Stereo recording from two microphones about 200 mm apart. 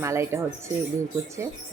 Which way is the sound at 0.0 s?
15° right (ahead or behind).